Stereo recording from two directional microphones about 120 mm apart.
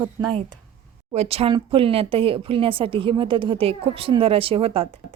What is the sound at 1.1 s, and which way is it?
Speech, 55° right (ahead or behind).